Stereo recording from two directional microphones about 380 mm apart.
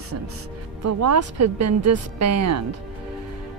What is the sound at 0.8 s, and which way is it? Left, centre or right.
Speech, right.